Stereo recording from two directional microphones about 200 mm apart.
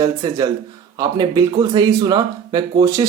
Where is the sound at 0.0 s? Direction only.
20° right (ahead or behind).